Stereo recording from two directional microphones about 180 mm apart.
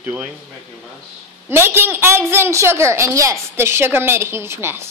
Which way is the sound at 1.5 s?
15° right (ahead or behind).